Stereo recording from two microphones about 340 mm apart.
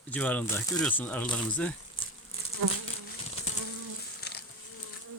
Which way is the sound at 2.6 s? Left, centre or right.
Right.